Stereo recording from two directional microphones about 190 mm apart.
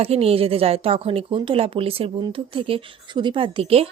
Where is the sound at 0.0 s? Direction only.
30° right (ahead or behind).